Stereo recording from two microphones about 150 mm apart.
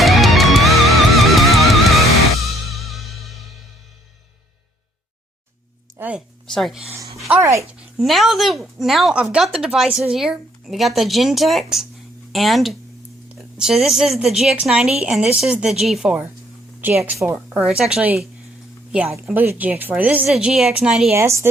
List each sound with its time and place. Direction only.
0.0 s music: centre (ahead or behind)
6.0 s a sound: 10° right (ahead or behind)
6.5 s speech: centre (ahead or behind)
7.3 s speech: 15° right (ahead or behind)
7.9 s a woman's voice: centre (ahead or behind)
21.1 s speech: 20° right (ahead or behind)